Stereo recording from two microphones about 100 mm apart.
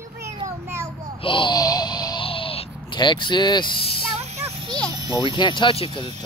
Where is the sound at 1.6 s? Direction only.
40° left (ahead or behind).